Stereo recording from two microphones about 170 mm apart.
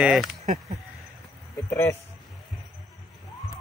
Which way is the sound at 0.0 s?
5° right (ahead or behind).